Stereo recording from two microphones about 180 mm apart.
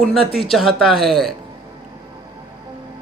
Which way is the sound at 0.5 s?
Centre (ahead or behind).